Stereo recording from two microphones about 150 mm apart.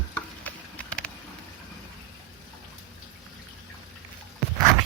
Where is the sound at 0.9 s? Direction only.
10° left (ahead or behind).